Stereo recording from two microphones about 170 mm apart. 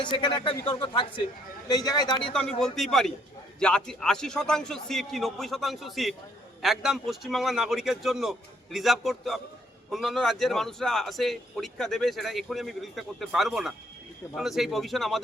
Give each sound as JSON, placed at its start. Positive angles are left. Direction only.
{"t": 0.0, "sound": "speech", "side_deg": 25}
{"t": 2.3, "sound": "speech", "side_deg": 5}